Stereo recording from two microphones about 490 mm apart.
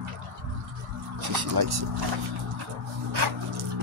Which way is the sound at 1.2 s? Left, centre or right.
Right.